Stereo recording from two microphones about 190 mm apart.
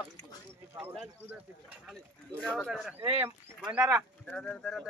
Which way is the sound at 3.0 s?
10° right (ahead or behind).